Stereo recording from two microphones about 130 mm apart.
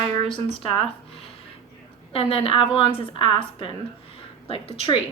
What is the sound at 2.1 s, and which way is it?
A woman's voice, 45° left (ahead or behind).